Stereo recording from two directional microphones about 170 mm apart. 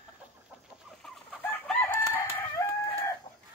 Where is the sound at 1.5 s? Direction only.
10° left (ahead or behind).